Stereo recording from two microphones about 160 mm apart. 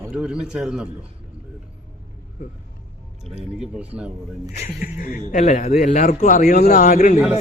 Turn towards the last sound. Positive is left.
turn(degrees=55)  # may be behind; listen again after turning